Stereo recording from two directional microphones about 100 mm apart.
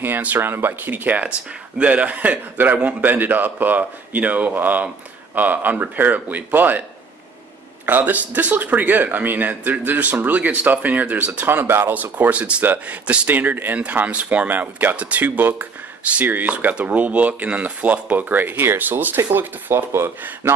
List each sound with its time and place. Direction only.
0.0 s speech: 20° right (ahead or behind)
7.8 s speech: 15° right (ahead or behind)